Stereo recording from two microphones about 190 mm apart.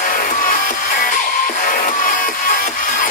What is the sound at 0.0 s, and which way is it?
Music, 45° left (ahead or behind).